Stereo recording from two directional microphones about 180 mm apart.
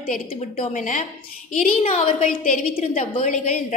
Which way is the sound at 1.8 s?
35° left (ahead or behind).